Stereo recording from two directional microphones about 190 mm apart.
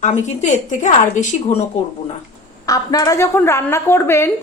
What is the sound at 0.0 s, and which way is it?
A woman's voice, 40° left (ahead or behind).